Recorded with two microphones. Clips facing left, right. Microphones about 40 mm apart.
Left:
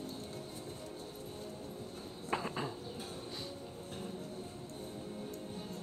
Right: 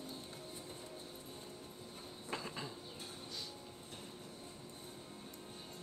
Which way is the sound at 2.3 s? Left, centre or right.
Left.